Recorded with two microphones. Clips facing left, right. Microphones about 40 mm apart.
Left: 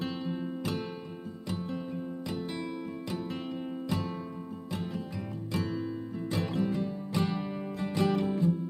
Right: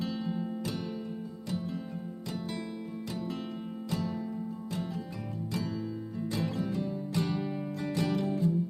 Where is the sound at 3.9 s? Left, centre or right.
Centre.